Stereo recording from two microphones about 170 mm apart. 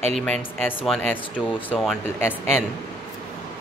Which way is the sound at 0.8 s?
Centre (ahead or behind).